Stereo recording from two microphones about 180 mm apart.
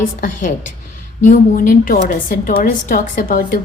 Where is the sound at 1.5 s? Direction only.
50° left (ahead or behind).